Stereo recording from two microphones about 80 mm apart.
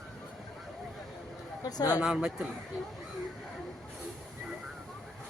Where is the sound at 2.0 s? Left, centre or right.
Centre.